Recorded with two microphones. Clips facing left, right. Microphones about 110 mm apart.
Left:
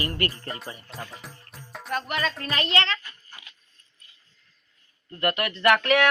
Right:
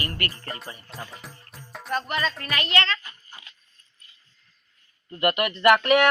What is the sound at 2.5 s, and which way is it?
Speech, 25° left (ahead or behind).